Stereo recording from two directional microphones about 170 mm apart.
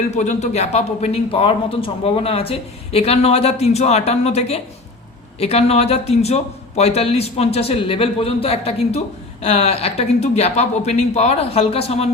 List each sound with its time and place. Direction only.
0.1 s a man's voice: 45° left (ahead or behind)